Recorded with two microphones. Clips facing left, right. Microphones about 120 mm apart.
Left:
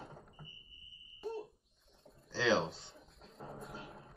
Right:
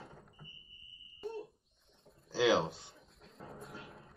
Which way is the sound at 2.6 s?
25° left (ahead or behind).